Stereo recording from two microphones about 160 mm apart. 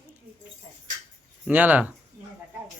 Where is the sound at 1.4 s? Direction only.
10° right (ahead or behind).